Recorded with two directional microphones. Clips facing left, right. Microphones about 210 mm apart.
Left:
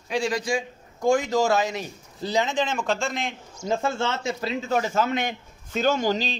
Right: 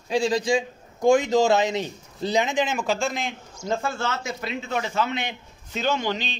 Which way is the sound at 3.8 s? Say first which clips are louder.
Left 2 dB; 25° left (ahead or behind).